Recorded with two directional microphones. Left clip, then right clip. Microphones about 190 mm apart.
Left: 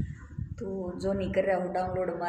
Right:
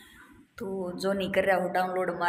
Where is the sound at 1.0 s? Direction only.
Centre (ahead or behind).